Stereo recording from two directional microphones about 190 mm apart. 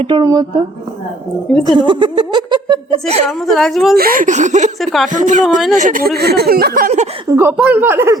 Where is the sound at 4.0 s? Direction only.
45° right (ahead or behind).